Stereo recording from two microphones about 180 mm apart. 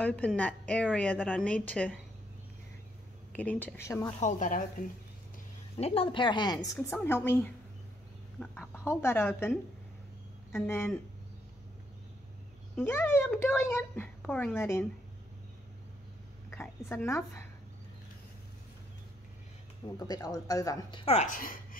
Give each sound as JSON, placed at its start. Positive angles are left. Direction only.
{"t": 0.0, "sound": "a child's voice", "side_deg": 10}
{"t": 3.3, "sound": "a child's voice", "side_deg": 10}
{"t": 4.2, "sound": "speech", "side_deg": 45}
{"t": 5.8, "sound": "a child's voice", "side_deg": 35}
{"t": 12.7, "sound": "a child's voice", "side_deg": 10}
{"t": 16.4, "sound": "a woman's voice", "side_deg": 15}
{"t": 20.1, "sound": "speech", "side_deg": 20}
{"t": 21.0, "sound": "speech", "side_deg": 35}